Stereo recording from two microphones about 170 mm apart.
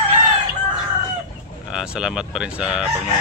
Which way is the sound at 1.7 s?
5° right (ahead or behind).